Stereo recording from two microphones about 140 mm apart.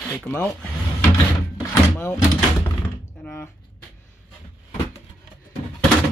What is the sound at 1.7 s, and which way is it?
Door, 15° left (ahead or behind).